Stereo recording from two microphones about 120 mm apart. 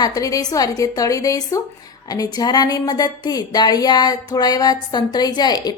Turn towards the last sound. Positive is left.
turn(degrees=35)  # may be behind; listen again after turning